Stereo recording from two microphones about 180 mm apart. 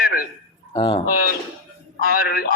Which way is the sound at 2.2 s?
60° left (ahead or behind).